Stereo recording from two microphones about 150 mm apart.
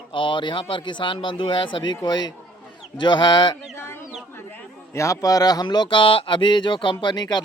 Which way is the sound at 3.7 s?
15° left (ahead or behind).